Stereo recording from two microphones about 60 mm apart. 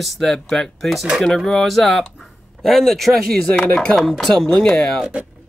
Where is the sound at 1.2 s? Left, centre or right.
Centre.